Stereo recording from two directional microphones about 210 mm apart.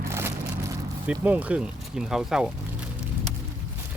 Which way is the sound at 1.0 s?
5° right (ahead or behind).